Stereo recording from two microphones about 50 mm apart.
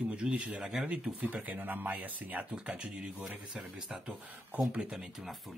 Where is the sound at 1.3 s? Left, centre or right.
Right.